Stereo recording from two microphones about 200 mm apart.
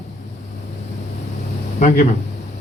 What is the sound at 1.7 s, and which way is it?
Speech, 40° left (ahead or behind).